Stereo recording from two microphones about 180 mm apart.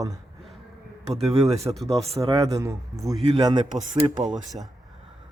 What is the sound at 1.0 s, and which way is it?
Speech, 35° right (ahead or behind).